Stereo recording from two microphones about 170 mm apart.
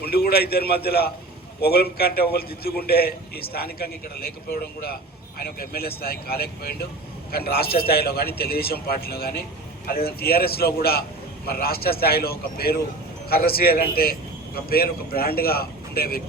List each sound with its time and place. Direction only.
0.0 s a man's voice: 65° left (ahead or behind)